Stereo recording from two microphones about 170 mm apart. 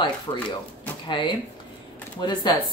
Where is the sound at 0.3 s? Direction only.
25° left (ahead or behind).